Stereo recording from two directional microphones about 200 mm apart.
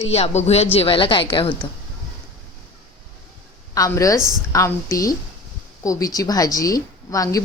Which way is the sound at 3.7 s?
15° left (ahead or behind).